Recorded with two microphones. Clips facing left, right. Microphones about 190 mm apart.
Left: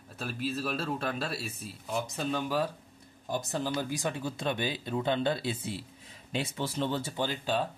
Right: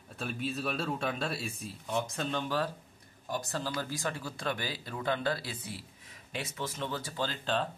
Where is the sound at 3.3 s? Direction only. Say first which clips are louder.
Left 3 dB; 20° left (ahead or behind).